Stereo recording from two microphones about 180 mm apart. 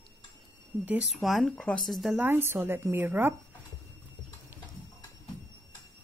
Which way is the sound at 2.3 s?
10° right (ahead or behind).